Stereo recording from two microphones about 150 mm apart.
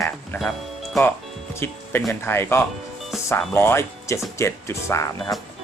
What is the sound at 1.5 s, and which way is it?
A man's voice, 15° left (ahead or behind).